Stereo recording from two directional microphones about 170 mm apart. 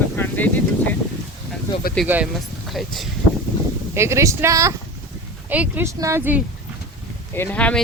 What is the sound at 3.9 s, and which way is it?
Speech, 15° right (ahead or behind).